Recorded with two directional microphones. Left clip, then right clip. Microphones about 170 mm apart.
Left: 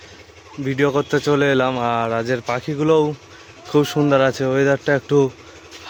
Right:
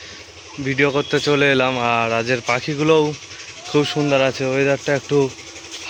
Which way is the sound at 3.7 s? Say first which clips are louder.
Left 1 dB; 30° left (ahead or behind).